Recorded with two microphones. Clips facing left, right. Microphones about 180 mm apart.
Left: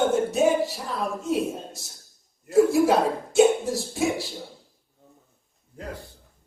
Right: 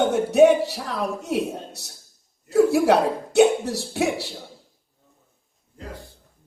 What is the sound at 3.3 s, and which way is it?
Speech, 65° right (ahead or behind).